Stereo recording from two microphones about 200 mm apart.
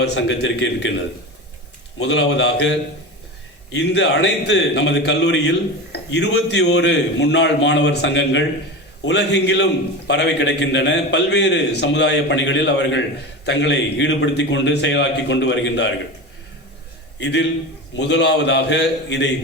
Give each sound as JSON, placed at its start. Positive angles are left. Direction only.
{"t": 0.0, "sound": "a man's voice", "side_deg": 60}
{"t": 2.0, "sound": "a man's voice", "side_deg": 60}
{"t": 17.2, "sound": "a man's voice", "side_deg": 60}